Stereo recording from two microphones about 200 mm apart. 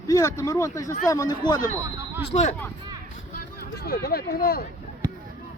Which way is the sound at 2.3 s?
35° left (ahead or behind).